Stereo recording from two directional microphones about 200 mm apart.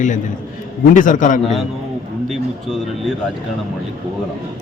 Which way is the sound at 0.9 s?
40° left (ahead or behind).